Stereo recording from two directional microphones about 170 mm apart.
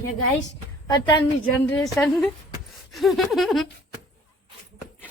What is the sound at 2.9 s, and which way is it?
Speech, centre (ahead or behind).